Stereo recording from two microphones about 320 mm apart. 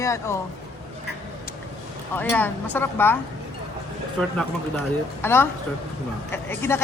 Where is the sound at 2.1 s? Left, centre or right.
Centre.